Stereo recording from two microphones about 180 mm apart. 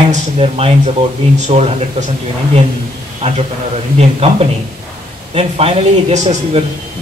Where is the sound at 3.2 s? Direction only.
30° right (ahead or behind).